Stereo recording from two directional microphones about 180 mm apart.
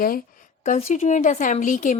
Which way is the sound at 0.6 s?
40° left (ahead or behind).